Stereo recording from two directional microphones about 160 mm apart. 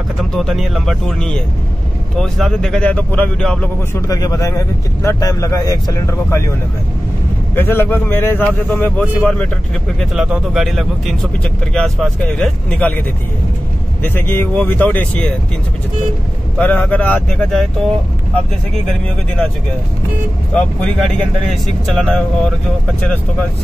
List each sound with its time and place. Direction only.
0.2 s speech: centre (ahead or behind)
3.9 s speech: 20° left (ahead or behind)
7.5 s speech: 10° left (ahead or behind)
14.0 s speech: 10° left (ahead or behind)
16.5 s speech: 10° left (ahead or behind)
20.5 s speech: 5° left (ahead or behind)